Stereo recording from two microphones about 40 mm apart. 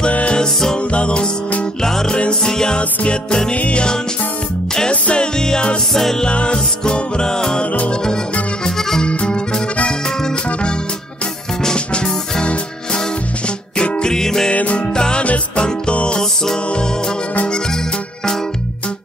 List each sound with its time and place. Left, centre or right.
0.1 s music: left
1.8 s music: centre
3.5 s music: left
5.0 s music: left
5.9 s music: centre
6.2 s music: left
8.6 s accordion: centre
9.0 s music: left
14.1 s music: centre
14.5 s music: left
15.0 s music: left
15.2 s music: left